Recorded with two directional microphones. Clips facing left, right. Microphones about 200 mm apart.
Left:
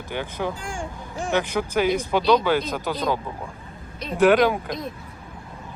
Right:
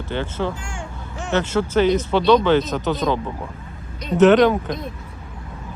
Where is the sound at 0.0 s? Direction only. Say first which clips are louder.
Right 3 dB; 15° left (ahead or behind).